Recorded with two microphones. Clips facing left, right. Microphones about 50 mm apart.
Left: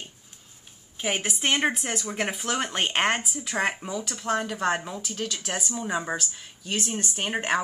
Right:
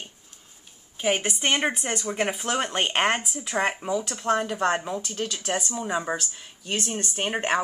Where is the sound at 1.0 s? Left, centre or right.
Centre.